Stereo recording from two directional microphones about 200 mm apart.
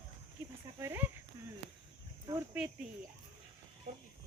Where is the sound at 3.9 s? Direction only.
35° right (ahead or behind).